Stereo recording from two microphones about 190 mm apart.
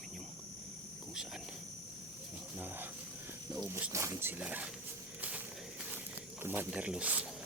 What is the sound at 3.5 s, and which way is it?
Speech, 5° right (ahead or behind).